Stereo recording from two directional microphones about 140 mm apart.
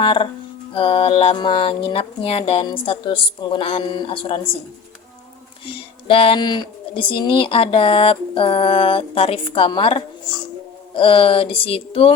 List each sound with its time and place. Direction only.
0.0 s speech: 40° left (ahead or behind)
5.6 s speech: 40° left (ahead or behind)